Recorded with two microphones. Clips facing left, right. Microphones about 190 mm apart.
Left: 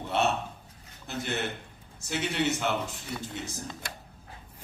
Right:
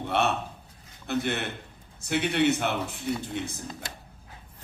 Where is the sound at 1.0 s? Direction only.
60° right (ahead or behind).